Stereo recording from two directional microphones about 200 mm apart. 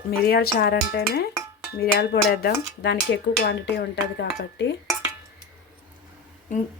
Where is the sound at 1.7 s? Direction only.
50° left (ahead or behind).